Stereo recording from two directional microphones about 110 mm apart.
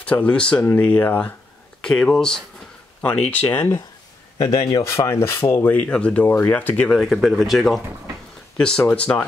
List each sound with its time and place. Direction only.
0.0 s speech: 10° left (ahead or behind)
3.3 s speech: 15° left (ahead or behind)
4.4 s speech: 35° left (ahead or behind); by 7.0 s 15° left (ahead or behind)
7.0 s speech: centre (ahead or behind)